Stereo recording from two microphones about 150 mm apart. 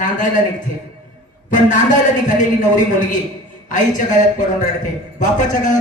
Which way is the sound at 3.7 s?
55° left (ahead or behind).